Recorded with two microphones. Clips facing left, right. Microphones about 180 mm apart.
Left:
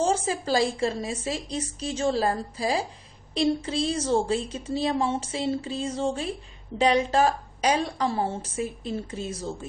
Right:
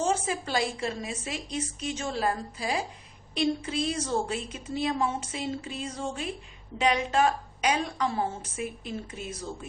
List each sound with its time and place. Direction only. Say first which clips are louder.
0.0 s a woman's voice: left 3 dB; 30° left (ahead or behind)